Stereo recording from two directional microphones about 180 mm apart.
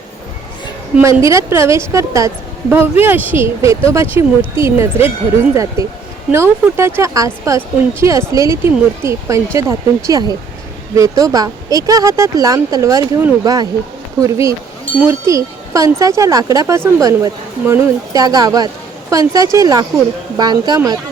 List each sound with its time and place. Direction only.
1.0 s a woman's voice: 15° right (ahead or behind)